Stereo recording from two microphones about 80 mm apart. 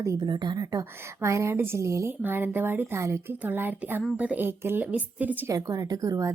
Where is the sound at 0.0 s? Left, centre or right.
Right.